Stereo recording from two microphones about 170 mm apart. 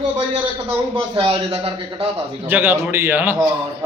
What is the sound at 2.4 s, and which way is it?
A man's voice, 10° right (ahead or behind).